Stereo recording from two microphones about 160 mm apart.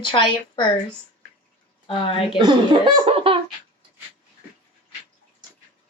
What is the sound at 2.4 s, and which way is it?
Speech, 30° right (ahead or behind).